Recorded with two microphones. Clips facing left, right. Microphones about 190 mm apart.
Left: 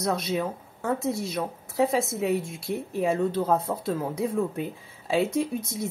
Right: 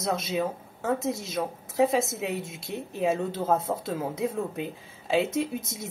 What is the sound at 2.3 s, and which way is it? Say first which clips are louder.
Speech: left 5 dB; 20° right (ahead or behind).